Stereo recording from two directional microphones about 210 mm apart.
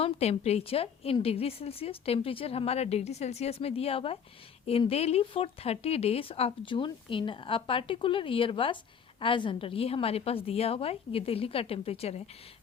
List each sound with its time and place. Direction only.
0.0 s speech: 30° left (ahead or behind)